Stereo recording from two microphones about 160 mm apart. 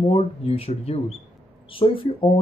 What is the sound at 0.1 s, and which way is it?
Speech, 40° left (ahead or behind).